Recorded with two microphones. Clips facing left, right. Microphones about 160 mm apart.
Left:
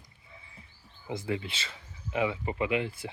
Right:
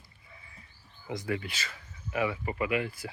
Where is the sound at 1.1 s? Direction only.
25° left (ahead or behind).